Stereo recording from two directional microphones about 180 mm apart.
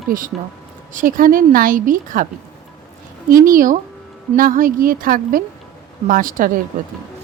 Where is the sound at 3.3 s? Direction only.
50° right (ahead or behind).